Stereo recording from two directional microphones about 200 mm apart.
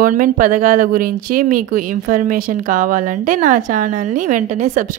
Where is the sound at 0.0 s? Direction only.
40° right (ahead or behind).